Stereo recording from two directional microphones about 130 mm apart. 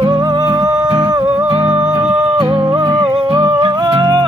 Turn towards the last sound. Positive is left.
turn(degrees=-35)  # may be behind; listen again after turning